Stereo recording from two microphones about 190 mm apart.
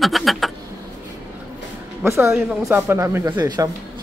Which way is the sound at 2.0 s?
15° right (ahead or behind).